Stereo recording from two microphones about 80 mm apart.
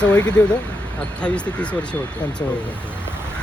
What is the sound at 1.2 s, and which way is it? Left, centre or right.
Speech, centre.